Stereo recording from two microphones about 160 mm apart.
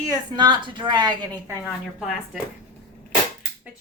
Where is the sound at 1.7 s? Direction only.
Centre (ahead or behind).